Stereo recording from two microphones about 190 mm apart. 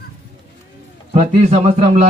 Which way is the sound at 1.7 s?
35° right (ahead or behind).